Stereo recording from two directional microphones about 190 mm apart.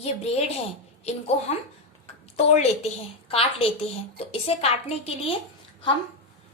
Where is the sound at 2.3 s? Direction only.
35° left (ahead or behind).